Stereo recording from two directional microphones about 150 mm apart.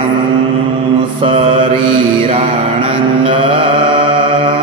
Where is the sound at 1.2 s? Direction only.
35° right (ahead or behind).